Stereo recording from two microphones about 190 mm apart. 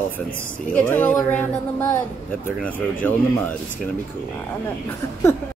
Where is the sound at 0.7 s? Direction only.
5° left (ahead or behind).